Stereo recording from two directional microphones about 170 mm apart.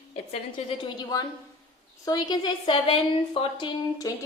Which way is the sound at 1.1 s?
20° left (ahead or behind).